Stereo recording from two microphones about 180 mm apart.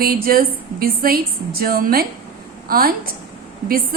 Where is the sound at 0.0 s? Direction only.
55° right (ahead or behind).